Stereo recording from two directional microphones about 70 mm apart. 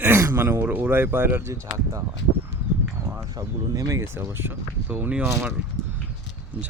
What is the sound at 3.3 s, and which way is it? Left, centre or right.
Speech, right.